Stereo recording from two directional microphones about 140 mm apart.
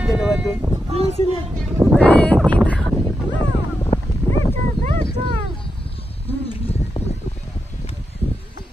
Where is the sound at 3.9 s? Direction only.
45° left (ahead or behind).